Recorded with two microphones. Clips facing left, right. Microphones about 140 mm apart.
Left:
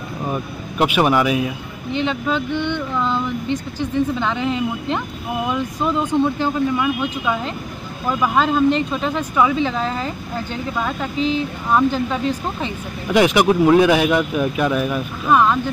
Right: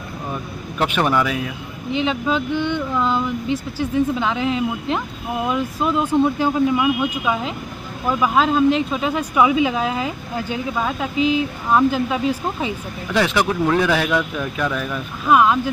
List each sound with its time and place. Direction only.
0.3 s speech: 10° left (ahead or behind)
1.9 s speech: 5° right (ahead or behind)
13.1 s speech: 15° left (ahead or behind)
15.2 s speech: 5° right (ahead or behind)